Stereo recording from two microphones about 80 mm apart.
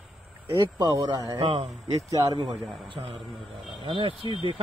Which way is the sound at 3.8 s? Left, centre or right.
Right.